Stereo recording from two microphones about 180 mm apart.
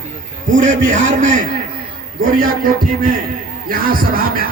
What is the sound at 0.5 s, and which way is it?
Speech, 45° right (ahead or behind).